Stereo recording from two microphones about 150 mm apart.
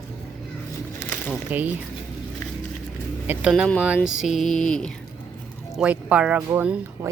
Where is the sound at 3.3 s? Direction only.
5° right (ahead or behind).